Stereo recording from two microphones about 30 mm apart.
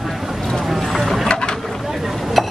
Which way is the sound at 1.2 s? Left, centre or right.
Left.